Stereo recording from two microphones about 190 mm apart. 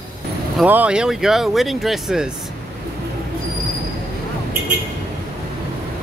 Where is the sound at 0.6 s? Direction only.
5° right (ahead or behind).